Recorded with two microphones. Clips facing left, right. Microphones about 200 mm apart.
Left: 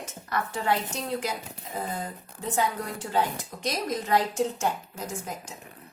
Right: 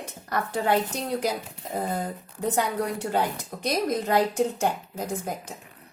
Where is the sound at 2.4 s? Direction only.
65° right (ahead or behind).